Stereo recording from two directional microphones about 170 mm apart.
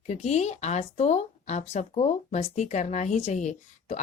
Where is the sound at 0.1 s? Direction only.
40° left (ahead or behind).